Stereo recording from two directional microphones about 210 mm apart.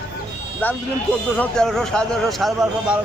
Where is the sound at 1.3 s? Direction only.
5° left (ahead or behind).